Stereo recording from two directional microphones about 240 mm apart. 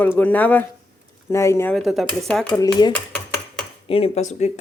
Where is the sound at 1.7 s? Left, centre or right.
Centre.